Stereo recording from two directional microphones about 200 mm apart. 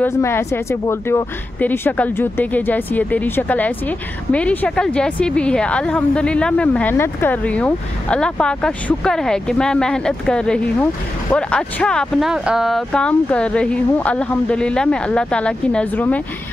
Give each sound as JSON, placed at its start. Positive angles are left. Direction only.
{"t": 0.0, "sound": "speech", "side_deg": 10}